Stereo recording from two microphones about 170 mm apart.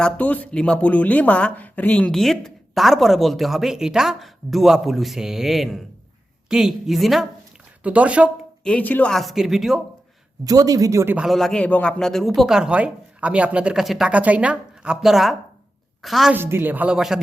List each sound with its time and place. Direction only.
0.0 s speech: 10° left (ahead or behind); by 8.3 s 5° right (ahead or behind)
8.6 s speech: 10° left (ahead or behind)
10.4 s a man's voice: 20° right (ahead or behind)
11.3 s a woman's voice: centre (ahead or behind)
16.3 s speech: 15° right (ahead or behind)